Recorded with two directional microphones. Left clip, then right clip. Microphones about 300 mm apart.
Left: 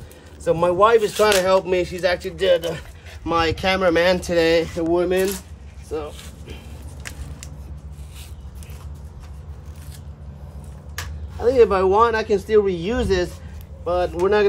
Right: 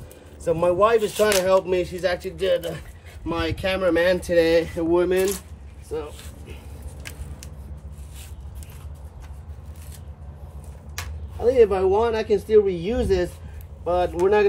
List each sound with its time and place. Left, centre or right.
0.4 s speech: centre
7.0 s vehicle: centre
11.3 s speech: centre
13.8 s speech: centre